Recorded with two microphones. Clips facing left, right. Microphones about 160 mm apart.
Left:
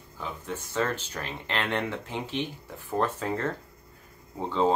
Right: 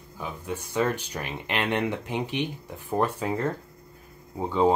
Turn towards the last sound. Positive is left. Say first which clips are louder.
# right 3 dB
turn(degrees=-10)  # may be behind; listen again after turning